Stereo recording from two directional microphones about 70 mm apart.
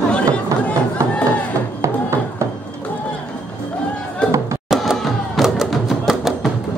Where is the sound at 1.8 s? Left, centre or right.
Right.